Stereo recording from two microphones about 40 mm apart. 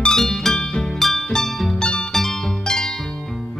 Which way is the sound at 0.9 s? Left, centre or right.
Centre.